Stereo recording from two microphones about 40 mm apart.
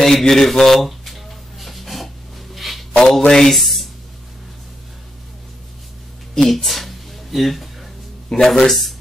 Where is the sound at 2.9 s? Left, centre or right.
Centre.